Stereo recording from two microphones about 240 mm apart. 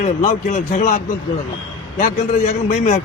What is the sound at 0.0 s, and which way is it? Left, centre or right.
A man's voice, left.